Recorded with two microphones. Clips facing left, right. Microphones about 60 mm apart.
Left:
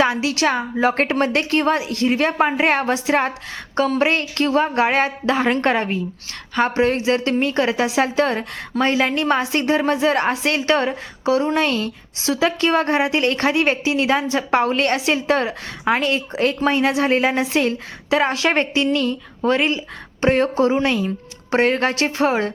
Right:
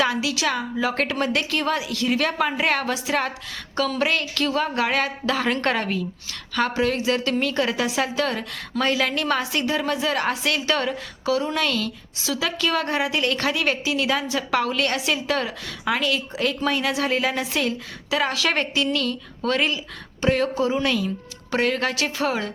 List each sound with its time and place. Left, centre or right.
0.0 s a woman's voice: left